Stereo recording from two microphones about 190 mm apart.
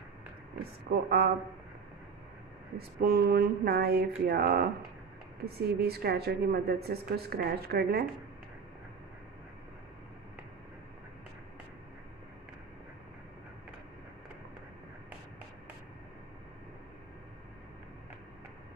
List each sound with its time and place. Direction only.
0.9 s a woman's voice: 55° right (ahead or behind)
3.0 s a woman's voice: 55° right (ahead or behind)